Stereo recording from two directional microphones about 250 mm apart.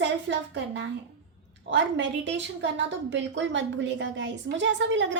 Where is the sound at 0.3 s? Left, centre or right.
Right.